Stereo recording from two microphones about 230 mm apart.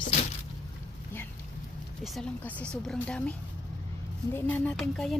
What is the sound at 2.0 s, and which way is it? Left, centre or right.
A woman's voice, centre.